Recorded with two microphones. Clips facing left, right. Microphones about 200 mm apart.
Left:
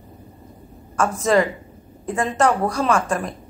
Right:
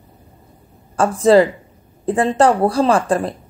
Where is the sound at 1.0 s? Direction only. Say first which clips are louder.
Right 6 dB; 30° right (ahead or behind).